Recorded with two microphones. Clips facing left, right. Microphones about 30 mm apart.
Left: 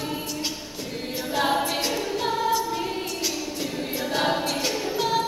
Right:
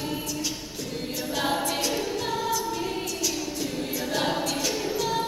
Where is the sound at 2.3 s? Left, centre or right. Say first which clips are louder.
Left 5 dB; left.